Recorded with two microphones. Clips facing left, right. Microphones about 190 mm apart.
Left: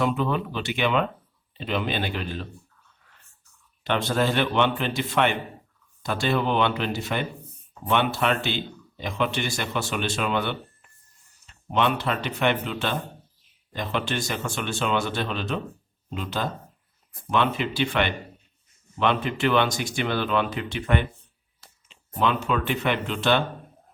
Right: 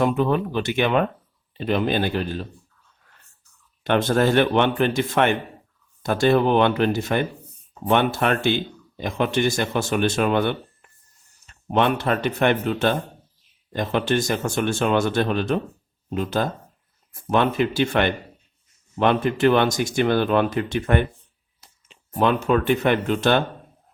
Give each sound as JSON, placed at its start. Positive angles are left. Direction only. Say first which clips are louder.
{"t": 0.0, "sound": "speech", "louder": "right 4 dB", "side_deg": -50}
{"t": 3.8, "sound": "speech", "louder": "right 5 dB", "side_deg": -50}